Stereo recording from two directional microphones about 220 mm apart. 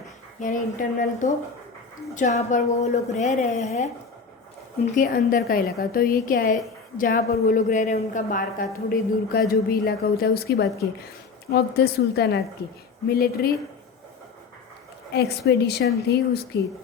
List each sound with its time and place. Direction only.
0.3 s a woman's voice: 35° left (ahead or behind)
4.9 s a woman's voice: 40° left (ahead or behind)
15.1 s a woman's voice: 50° left (ahead or behind)